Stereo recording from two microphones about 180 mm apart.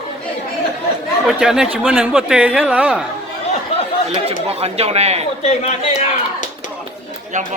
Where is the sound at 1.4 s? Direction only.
5° right (ahead or behind).